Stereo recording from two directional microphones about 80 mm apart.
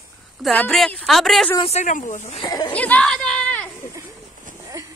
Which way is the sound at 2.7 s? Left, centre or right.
Centre.